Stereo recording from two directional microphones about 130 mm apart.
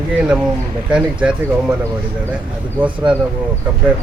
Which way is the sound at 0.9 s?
10° right (ahead or behind).